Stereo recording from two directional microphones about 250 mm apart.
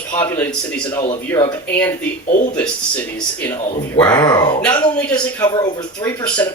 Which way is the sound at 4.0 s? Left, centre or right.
Centre.